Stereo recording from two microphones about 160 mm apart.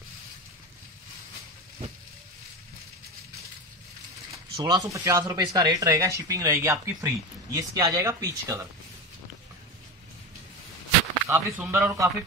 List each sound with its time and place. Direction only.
4.6 s speech: 20° right (ahead or behind)
11.2 s speech: 10° right (ahead or behind)